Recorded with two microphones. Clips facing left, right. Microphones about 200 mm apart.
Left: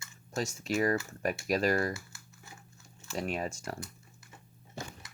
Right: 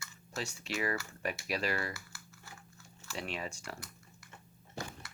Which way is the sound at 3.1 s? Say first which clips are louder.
Left 6 dB; 45° left (ahead or behind).